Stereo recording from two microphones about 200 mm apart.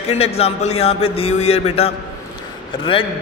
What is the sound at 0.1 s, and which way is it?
A man's voice, 30° left (ahead or behind).